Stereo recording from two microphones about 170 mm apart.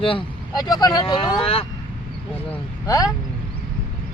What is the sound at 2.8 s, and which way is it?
Speech, 20° left (ahead or behind).